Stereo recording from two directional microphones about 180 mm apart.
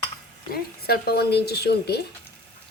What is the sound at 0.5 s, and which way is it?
A woman's voice, 60° left (ahead or behind).